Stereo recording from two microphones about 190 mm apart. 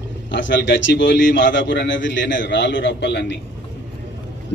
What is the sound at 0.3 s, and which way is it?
A man's voice, 70° left (ahead or behind).